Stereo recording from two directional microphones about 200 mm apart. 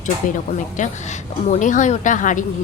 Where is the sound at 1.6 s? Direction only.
40° left (ahead or behind).